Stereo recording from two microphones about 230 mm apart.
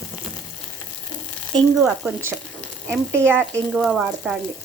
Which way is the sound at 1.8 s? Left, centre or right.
Centre.